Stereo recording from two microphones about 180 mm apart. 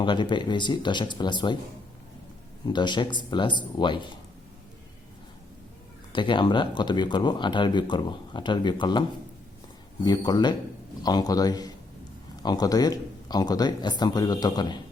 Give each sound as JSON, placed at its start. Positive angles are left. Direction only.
{"t": 0.0, "sound": "speech", "side_deg": 25}
{"t": 2.6, "sound": "speech", "side_deg": 25}
{"t": 6.1, "sound": "speech", "side_deg": 25}